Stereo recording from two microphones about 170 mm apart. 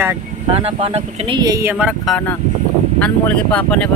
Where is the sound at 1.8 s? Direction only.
5° right (ahead or behind).